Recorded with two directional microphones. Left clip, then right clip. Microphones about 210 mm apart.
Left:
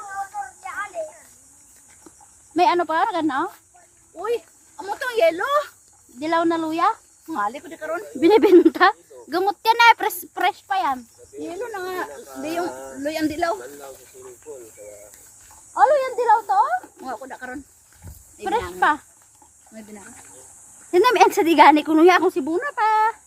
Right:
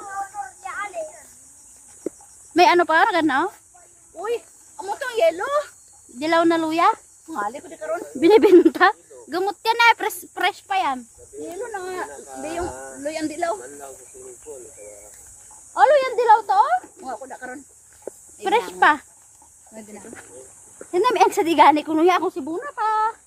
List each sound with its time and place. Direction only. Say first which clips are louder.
0.2 s a sound: even; 25° right (ahead or behind)
2.6 s speech: right 3 dB; 30° right (ahead or behind)
4.2 s speech: left 1 dB; 20° left (ahead or behind); by 5.7 s 35° left (ahead or behind)
6.1 s speech: right 2 dB; 25° right (ahead or behind)
7.3 s speech: left 2 dB; 35° left (ahead or behind)
8.2 s speech: right 1 dB; 10° right (ahead or behind)
9.3 s speech: left 3 dB; 5° left (ahead or behind)
11.3 s speech: left 1 dB; 40° left (ahead or behind)
14.5 s a sound: even; 70° left (ahead or behind)
15.7 s speech: right 1 dB; 10° right (ahead or behind)
17.0 s speech: even; 40° left (ahead or behind)
18.4 s speech: right 3 dB; 30° left (ahead or behind)
18.8 s speech: right 3 dB; 30° right (ahead or behind)
20.9 s speech: left 2 dB; 15° left (ahead or behind)